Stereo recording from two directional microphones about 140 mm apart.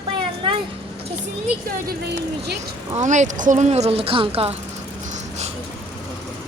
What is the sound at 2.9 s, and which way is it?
Speech, 60° right (ahead or behind).